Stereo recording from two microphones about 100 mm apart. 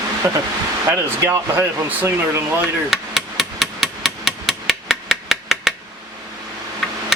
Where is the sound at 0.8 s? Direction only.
30° right (ahead or behind).